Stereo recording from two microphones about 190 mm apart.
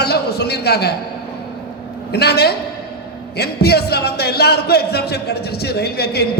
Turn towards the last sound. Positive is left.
turn(degrees=55)  # may be behind; listen again after turning